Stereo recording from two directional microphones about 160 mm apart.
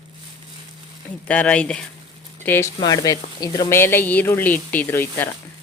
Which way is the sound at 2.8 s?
20° left (ahead or behind).